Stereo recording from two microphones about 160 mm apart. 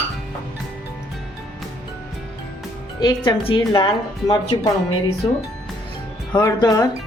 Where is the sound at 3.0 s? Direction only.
30° left (ahead or behind).